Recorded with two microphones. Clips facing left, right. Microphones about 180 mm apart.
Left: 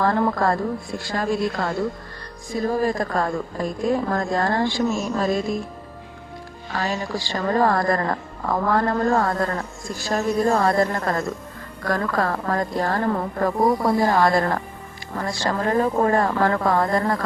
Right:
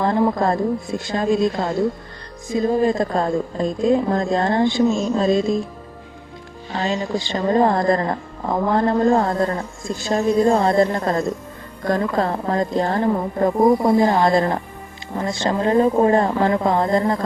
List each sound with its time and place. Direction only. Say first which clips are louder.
0.0 s a woman's voice: right 2 dB; 20° right (ahead or behind)
6.7 s a woman's voice: right 4 dB; 25° right (ahead or behind)